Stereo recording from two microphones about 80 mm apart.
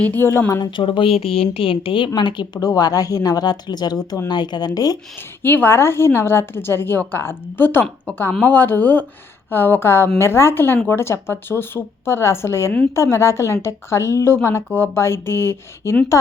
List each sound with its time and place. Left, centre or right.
0.0 s a woman's voice: left
0.3 s a woman's voice: left
0.6 s a woman's voice: left
2.6 s speech: left
5.4 s a woman's voice: left